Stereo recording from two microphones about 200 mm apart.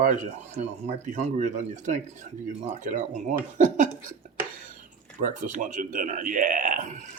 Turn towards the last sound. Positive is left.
turn(degrees=-40)  # may be behind; listen again after turning